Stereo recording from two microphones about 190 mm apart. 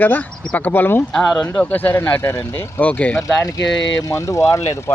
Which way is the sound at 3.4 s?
20° left (ahead or behind).